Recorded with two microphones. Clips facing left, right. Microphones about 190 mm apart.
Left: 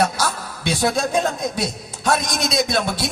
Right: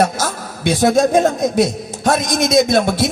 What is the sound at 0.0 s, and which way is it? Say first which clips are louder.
A man's voice: right 3 dB; 50° right (ahead or behind).